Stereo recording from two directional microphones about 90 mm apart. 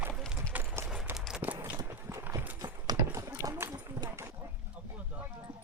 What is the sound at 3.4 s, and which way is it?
Horse, 45° right (ahead or behind).